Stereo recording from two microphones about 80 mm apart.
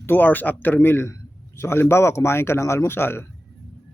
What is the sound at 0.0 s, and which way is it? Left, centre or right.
Speech, left.